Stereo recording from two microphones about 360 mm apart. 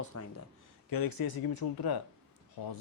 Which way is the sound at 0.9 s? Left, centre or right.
Left.